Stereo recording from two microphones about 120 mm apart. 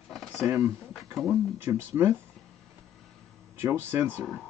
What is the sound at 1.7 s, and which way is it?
Speech, 20° right (ahead or behind).